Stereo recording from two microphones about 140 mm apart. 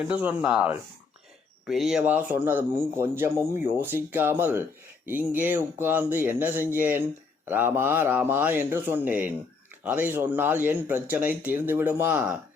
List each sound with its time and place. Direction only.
0.0 s speech: 10° right (ahead or behind)